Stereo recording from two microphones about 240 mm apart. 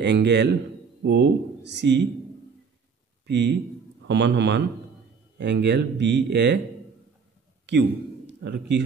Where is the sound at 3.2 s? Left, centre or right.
Right.